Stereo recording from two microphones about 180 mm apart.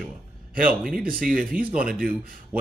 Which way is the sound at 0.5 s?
50° right (ahead or behind).